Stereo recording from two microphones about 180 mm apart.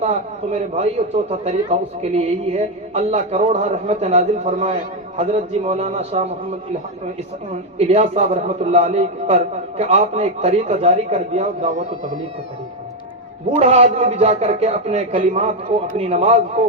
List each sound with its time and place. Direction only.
0.0 s a man's voice: 35° right (ahead or behind)
7.5 s a man's voice: 35° right (ahead or behind)
13.6 s a man's voice: 35° right (ahead or behind)